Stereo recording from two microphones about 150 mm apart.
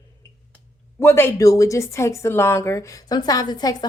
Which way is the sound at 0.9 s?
15° left (ahead or behind).